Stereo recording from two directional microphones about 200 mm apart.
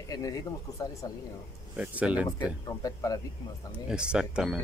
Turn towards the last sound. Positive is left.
turn(degrees=-5)  # may be behind; listen again after turning